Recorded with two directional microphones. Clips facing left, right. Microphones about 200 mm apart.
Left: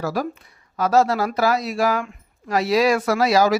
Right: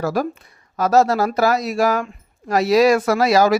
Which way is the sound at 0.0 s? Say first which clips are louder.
Right 3 dB; 50° right (ahead or behind).